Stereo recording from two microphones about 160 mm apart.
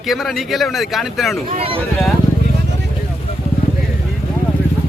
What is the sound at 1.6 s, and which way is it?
Speech, 35° right (ahead or behind).